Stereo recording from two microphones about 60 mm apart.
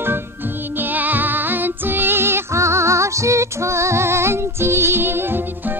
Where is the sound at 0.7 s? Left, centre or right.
Right.